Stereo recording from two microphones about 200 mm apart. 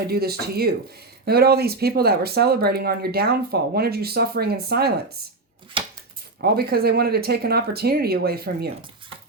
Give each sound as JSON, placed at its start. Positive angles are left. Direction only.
{"t": 0.1, "sound": "speech", "side_deg": -50}
{"t": 5.8, "sound": "a sound", "side_deg": -25}
{"t": 6.4, "sound": "speech", "side_deg": -50}